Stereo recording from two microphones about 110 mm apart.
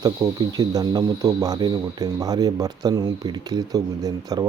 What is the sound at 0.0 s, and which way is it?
Speech, 35° right (ahead or behind).